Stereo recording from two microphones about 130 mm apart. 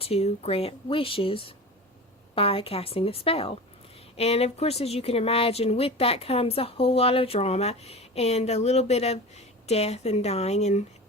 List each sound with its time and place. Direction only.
0.0 s speech: 50° left (ahead or behind)